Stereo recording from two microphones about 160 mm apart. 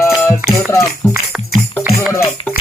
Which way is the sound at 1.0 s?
5° left (ahead or behind).